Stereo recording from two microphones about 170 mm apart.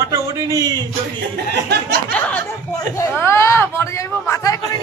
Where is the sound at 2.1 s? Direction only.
10° left (ahead or behind).